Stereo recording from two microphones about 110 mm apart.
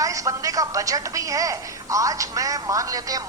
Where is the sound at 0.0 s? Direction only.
30° right (ahead or behind).